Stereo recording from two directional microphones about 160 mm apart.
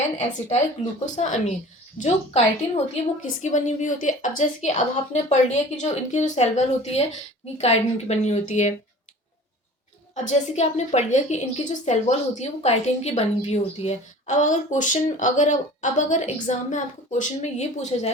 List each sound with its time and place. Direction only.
0.2 s a woman's voice: 45° left (ahead or behind)
10.2 s a woman's voice: 45° left (ahead or behind)